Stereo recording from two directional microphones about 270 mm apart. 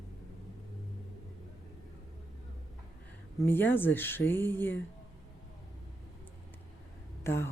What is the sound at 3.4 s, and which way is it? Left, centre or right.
Speech, centre.